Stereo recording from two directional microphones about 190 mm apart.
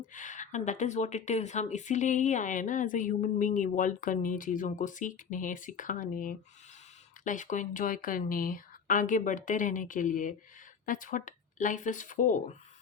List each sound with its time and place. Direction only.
0.1 s speech: 40° left (ahead or behind)